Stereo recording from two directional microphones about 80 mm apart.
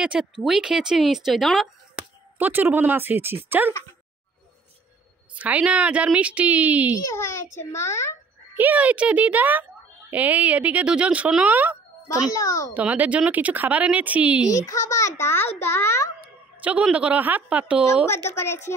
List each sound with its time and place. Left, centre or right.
0.0 s speech: centre
2.3 s speech: right
5.3 s speech: centre
7.1 s a child's voice: left
8.5 s speech: centre
14.5 s a child's voice: left
16.9 s speech: centre
18.0 s a child's voice: left